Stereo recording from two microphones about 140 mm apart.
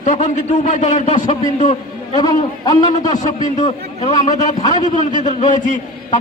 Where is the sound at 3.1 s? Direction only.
60° left (ahead or behind).